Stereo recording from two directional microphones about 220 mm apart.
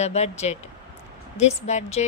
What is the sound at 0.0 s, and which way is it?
A woman's voice, 30° left (ahead or behind).